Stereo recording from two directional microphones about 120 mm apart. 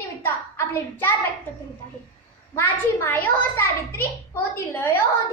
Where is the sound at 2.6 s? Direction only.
15° left (ahead or behind).